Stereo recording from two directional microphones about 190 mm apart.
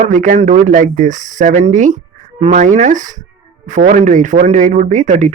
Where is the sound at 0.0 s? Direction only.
40° right (ahead or behind).